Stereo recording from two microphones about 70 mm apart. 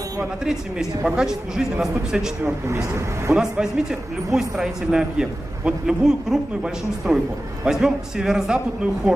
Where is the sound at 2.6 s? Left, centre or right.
Right.